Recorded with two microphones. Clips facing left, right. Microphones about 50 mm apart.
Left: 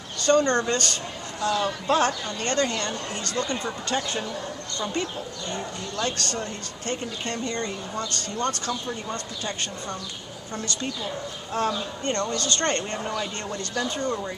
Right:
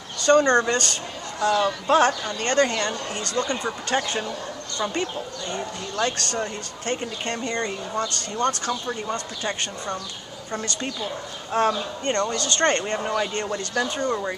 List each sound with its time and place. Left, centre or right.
0.3 s speech: centre
5.9 s speech: right
6.4 s speech: right
11.5 s speech: right
12.3 s speech: right
13.1 s speech: right
13.9 s speech: right